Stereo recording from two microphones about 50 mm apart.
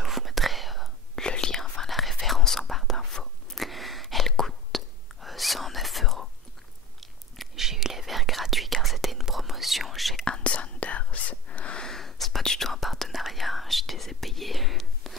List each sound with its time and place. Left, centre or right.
0.0 s whispering: centre
1.2 s whispering: centre
10.2 s whispering: left
11.8 s whispering: centre